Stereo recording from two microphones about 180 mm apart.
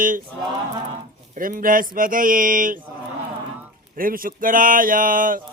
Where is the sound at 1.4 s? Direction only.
50° right (ahead or behind).